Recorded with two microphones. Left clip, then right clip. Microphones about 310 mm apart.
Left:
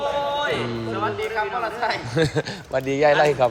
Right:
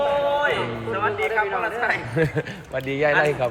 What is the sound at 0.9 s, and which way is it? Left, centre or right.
A man's voice, centre.